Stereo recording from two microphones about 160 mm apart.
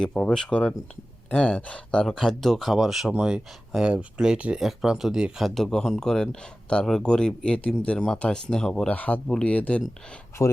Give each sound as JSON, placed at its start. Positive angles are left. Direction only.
{"t": 0.0, "sound": "speech", "side_deg": 5}